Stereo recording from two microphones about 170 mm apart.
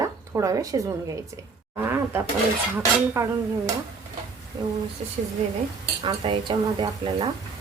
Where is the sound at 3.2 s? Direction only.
20° right (ahead or behind).